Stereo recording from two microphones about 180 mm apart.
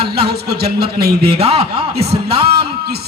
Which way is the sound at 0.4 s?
60° right (ahead or behind).